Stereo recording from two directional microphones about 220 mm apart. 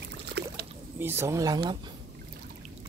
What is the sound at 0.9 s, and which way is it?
Speech, 10° right (ahead or behind).